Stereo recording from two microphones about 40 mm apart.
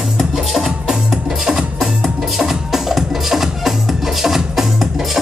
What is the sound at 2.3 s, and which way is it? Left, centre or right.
Music, centre.